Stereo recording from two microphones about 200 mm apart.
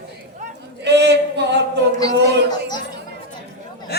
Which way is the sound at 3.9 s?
50° left (ahead or behind).